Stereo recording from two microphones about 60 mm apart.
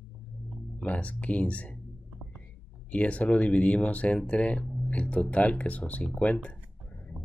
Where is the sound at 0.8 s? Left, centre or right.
Left.